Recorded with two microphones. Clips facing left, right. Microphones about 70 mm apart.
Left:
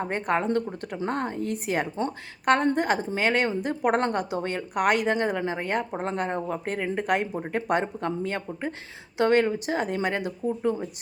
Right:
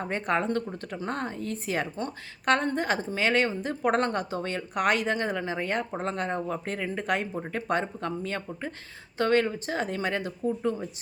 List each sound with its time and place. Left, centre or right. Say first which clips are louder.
0.0 s speech: left 2 dB; centre; by 2.1 s left
2.4 s speech: left 3 dB; centre
5.6 s speech: left 2 dB; centre
6.0 s speech: left 2 dB; centre
6.9 s speech: left 3 dB; centre